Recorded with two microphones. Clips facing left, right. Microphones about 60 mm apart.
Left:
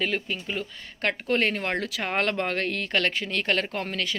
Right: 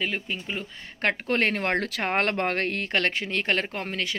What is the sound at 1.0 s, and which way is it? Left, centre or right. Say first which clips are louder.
Speech: even; right.